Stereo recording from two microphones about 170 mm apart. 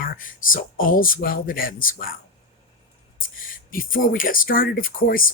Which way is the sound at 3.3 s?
55° left (ahead or behind).